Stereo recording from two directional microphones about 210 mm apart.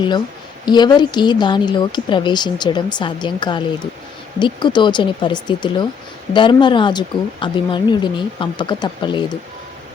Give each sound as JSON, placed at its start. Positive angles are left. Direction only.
{"t": 0.6, "sound": "speech", "side_deg": 20}